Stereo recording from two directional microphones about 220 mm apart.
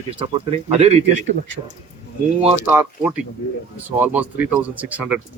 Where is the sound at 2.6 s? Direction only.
10° right (ahead or behind).